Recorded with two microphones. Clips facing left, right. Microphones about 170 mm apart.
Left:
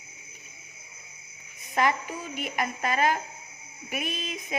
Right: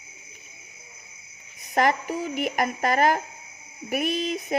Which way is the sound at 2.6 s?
40° right (ahead or behind).